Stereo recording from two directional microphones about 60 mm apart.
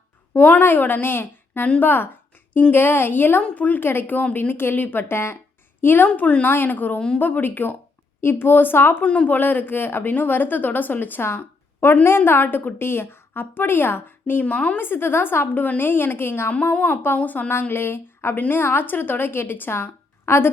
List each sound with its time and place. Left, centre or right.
0.3 s a woman's voice: left
3.8 s speech: left
4.4 s speech: left
9.0 s a woman's voice: centre
9.3 s speech: left
14.4 s a woman's voice: left
14.8 s a woman's voice: left
17.5 s speech: left
20.2 s a woman's voice: left